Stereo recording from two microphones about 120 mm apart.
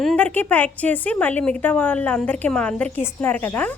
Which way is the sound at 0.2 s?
10° left (ahead or behind).